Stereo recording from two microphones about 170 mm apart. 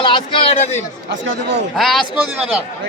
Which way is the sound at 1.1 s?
90° right.